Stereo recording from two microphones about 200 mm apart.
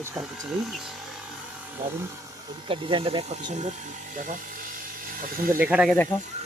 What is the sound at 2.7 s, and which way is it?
Speech, 25° right (ahead or behind).